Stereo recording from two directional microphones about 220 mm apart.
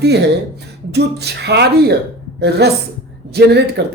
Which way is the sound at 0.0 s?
50° right (ahead or behind).